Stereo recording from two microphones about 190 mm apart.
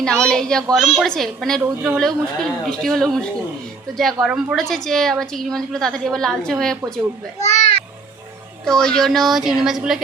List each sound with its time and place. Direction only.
0.0 s a woman's voice: 5° left (ahead or behind)
7.4 s a child's voice: 35° left (ahead or behind)
8.6 s a woman's voice: 5° left (ahead or behind)